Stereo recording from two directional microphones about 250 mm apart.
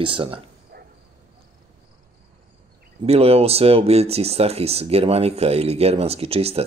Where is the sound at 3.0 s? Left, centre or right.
Right.